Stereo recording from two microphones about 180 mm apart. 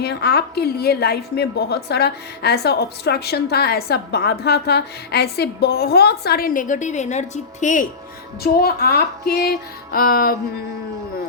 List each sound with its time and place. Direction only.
0.0 s a woman's voice: 65° left (ahead or behind); by 7.9 s 45° left (ahead or behind)
8.5 s a woman's voice: 60° left (ahead or behind)